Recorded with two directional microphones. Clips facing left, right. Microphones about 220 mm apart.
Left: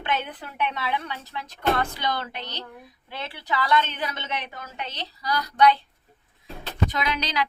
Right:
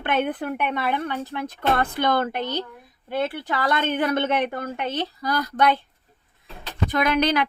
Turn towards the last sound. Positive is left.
turn(degrees=-55)  # may be behind; listen again after turning